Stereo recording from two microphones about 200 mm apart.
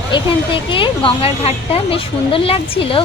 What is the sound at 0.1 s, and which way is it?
Speech, 25° left (ahead or behind).